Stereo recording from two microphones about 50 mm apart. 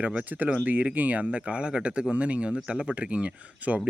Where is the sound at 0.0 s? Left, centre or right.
Right.